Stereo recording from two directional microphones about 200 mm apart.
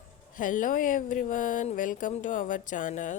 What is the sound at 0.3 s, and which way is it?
A woman's voice, 40° left (ahead or behind).